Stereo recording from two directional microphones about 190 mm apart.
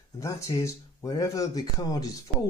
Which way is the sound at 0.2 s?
15° left (ahead or behind).